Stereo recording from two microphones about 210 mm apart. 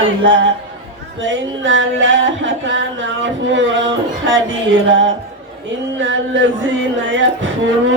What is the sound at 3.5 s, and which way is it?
Speech, 60° right (ahead or behind).